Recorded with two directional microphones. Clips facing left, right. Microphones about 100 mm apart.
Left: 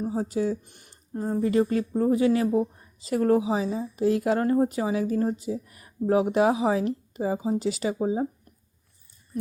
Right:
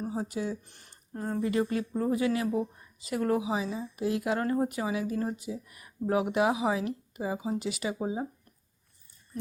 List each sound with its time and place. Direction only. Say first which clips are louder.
0.0 s speech: left 6 dB; 30° left (ahead or behind)
0.6 s a sound: left 3 dB; 15° left (ahead or behind)
1.3 s speech: left 5 dB; 35° left (ahead or behind)